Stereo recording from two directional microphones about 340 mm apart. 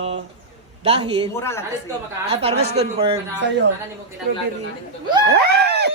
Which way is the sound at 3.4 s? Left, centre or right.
Right.